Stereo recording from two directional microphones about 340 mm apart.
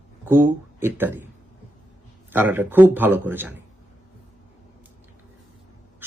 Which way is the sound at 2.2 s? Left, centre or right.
Centre.